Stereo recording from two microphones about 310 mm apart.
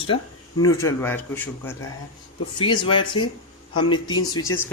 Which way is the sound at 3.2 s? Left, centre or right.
Left.